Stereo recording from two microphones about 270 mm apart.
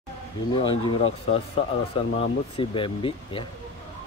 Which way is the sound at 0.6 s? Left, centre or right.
Centre.